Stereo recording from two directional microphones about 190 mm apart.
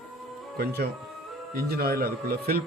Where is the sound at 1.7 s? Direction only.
55° right (ahead or behind).